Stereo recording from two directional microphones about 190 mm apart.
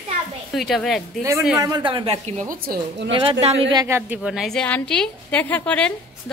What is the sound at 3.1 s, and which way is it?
Speech, 25° right (ahead or behind).